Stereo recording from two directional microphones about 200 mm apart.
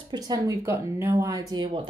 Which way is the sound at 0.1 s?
20° right (ahead or behind).